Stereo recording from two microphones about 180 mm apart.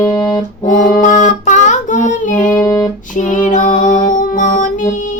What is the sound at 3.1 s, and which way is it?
Music, 45° left (ahead or behind).